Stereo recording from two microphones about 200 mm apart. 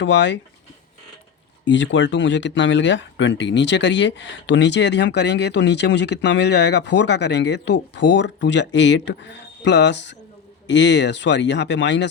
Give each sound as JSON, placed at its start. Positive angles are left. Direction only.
{"t": 0.0, "sound": "speech", "side_deg": 60}
{"t": 1.6, "sound": "speech", "side_deg": 65}